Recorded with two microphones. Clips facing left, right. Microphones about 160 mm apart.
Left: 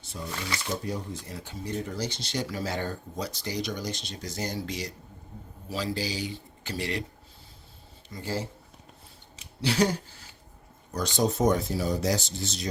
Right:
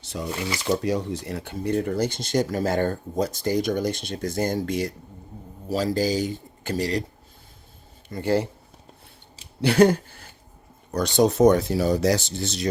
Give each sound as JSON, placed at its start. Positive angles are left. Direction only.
{"t": 0.0, "sound": "speech", "side_deg": -90}
{"t": 8.1, "sound": "speech", "side_deg": -60}
{"t": 9.6, "sound": "speech", "side_deg": -55}
{"t": 10.9, "sound": "speech", "side_deg": -70}